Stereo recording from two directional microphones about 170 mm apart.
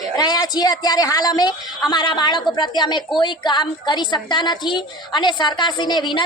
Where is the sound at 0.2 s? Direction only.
25° left (ahead or behind).